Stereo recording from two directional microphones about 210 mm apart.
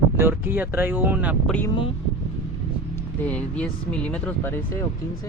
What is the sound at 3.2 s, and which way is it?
Speech, 5° left (ahead or behind).